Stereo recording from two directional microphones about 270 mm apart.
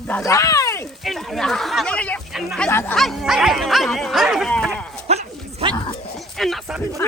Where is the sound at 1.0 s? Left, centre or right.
Centre.